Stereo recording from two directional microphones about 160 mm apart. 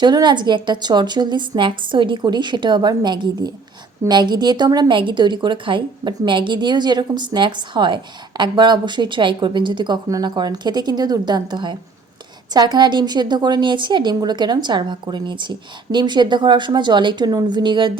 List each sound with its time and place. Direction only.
0.0 s speech: 25° right (ahead or behind)